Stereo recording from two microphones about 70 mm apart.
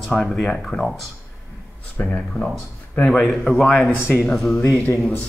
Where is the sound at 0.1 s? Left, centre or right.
Centre.